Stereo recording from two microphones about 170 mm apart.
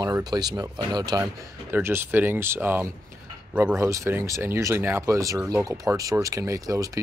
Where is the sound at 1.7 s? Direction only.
10° right (ahead or behind).